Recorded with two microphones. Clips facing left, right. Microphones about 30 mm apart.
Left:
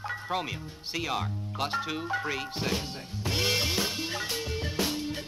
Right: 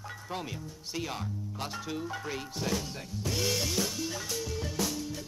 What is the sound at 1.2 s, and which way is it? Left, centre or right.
Music, left.